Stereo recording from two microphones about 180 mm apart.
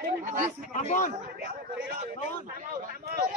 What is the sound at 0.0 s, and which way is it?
Speech, 45° right (ahead or behind).